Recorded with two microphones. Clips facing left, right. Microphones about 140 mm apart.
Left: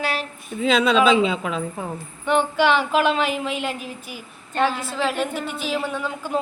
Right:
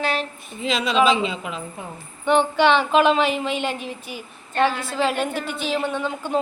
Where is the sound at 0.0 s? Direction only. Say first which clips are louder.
Right 2 dB; 5° left (ahead or behind).